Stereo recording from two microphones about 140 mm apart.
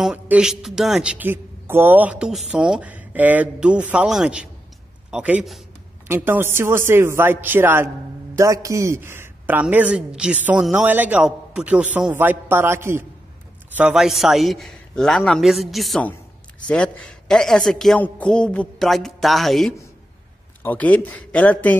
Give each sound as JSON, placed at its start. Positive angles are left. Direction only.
{"t": 0.0, "sound": "a man's voice", "side_deg": -5}
{"t": 13.7, "sound": "a man's voice", "side_deg": -5}